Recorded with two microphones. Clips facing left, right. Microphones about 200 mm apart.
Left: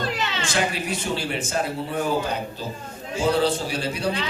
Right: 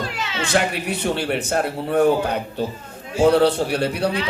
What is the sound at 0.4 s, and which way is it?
A man's voice, 65° right (ahead or behind).